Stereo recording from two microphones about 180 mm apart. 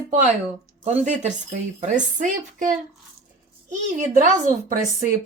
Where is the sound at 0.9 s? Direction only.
40° right (ahead or behind).